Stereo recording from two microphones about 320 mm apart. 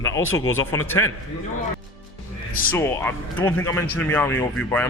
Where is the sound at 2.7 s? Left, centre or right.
Centre.